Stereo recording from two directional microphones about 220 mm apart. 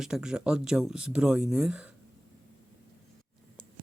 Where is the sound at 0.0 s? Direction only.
5° right (ahead or behind).